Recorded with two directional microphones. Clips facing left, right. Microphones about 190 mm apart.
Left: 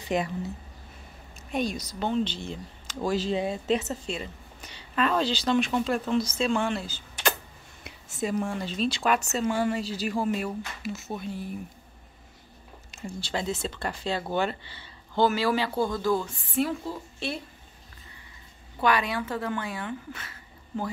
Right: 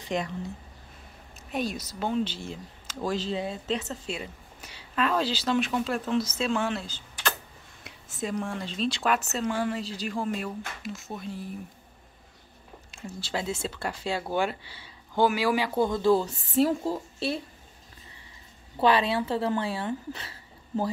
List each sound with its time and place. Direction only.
0.0 s a woman's voice: 5° left (ahead or behind)
1.5 s speech: 5° right (ahead or behind)
3.3 s speech: 15° left (ahead or behind)
4.0 s speech: 5° right (ahead or behind)
13.2 s speech: 5° right (ahead or behind); by 17.4 s 40° right (ahead or behind)
18.8 s speech: 30° right (ahead or behind)